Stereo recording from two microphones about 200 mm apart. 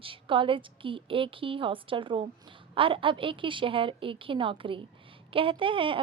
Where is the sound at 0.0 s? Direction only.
25° right (ahead or behind).